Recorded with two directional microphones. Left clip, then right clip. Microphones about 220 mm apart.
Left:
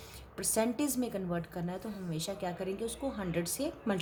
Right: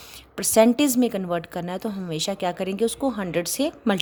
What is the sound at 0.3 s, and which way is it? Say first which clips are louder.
A woman's voice: right 14 dB; 45° right (ahead or behind).